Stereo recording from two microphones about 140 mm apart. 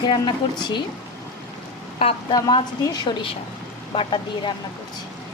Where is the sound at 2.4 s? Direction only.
30° left (ahead or behind).